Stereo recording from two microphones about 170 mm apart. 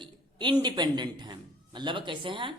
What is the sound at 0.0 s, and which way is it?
A man's voice, 30° right (ahead or behind).